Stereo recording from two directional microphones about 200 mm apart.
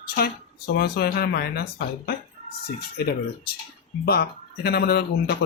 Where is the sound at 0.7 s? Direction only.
50° left (ahead or behind).